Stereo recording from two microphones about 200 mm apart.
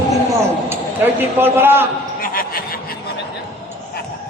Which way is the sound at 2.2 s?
45° left (ahead or behind).